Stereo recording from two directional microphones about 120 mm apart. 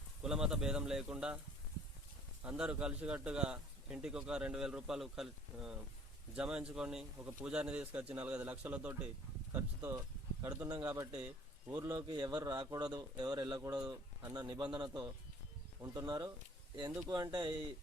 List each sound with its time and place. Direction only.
0.2 s a man's voice: 5° right (ahead or behind)
2.4 s a man's voice: 10° right (ahead or behind)
9.5 s a man's voice: 25° right (ahead or behind)